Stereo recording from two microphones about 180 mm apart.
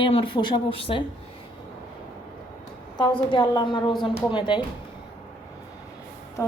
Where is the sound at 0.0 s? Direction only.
30° left (ahead or behind).